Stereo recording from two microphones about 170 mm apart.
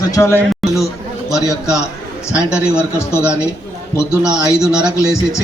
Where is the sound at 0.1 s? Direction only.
15° left (ahead or behind).